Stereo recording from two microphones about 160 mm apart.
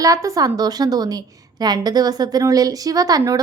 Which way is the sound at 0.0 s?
20° right (ahead or behind).